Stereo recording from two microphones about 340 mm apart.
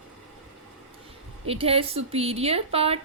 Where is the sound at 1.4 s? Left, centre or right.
Centre.